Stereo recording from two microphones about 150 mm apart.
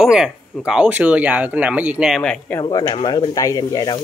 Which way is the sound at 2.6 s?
30° left (ahead or behind).